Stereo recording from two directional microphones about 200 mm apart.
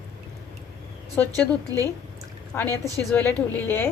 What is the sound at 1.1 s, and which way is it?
A woman's voice, 10° left (ahead or behind).